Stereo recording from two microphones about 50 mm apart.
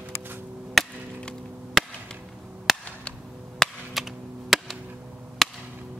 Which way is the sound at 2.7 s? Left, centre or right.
Centre.